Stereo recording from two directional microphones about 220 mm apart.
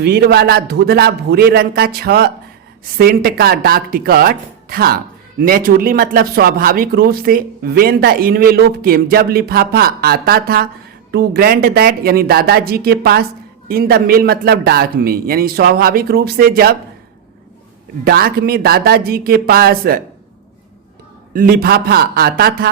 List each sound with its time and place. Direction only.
0.0 s speech: 45° right (ahead or behind)
18.0 s speech: 45° right (ahead or behind)
21.3 s speech: 40° right (ahead or behind)